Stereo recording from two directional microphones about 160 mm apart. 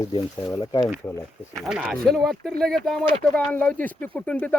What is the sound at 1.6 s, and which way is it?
Speech, 5° right (ahead or behind).